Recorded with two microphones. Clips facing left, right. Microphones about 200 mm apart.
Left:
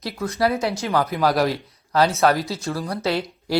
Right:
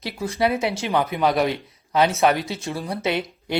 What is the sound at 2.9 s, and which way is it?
Speech, 20° right (ahead or behind).